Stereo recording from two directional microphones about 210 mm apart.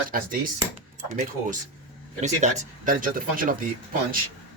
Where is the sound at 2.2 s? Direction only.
35° right (ahead or behind).